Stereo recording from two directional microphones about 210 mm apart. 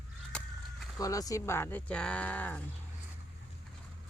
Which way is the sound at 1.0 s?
15° left (ahead or behind).